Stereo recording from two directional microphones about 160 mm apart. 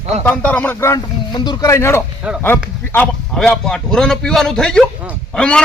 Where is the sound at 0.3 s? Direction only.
10° left (ahead or behind).